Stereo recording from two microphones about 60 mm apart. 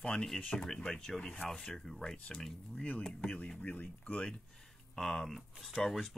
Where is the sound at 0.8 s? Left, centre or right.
Centre.